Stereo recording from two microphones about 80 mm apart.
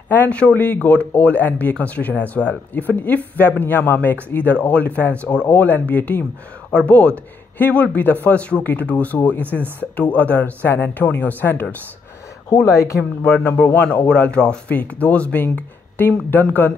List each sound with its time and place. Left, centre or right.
0.1 s speech: left
12.6 s speech: left
13.2 s speech: left